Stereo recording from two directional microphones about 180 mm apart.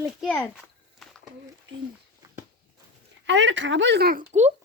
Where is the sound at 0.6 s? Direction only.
Centre (ahead or behind).